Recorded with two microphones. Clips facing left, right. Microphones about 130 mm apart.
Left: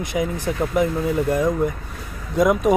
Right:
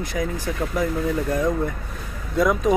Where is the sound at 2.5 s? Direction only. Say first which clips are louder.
Left 3 dB; 5° left (ahead or behind).